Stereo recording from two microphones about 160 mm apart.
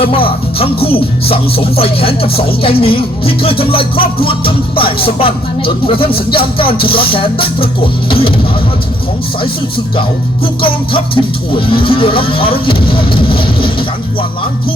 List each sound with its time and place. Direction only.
0.0 s music: 35° left (ahead or behind)
10.4 s music: 35° left (ahead or behind)